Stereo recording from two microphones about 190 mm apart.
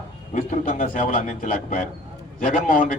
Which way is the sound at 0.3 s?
40° left (ahead or behind).